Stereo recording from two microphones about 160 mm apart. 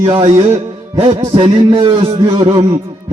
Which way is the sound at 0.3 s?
40° right (ahead or behind).